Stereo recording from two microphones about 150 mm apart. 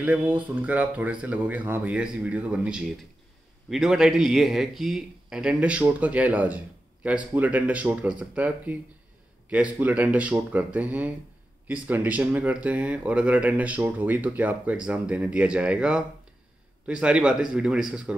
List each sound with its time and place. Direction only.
0.0 s a man's voice: 10° right (ahead or behind)